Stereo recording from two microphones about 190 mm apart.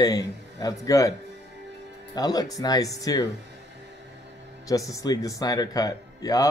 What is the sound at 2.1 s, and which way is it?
Speech, 20° left (ahead or behind).